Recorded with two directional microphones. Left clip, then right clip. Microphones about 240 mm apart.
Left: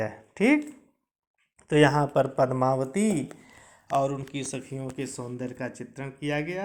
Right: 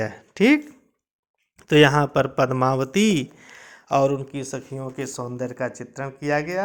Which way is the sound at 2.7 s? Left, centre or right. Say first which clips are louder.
Right 3 dB; right.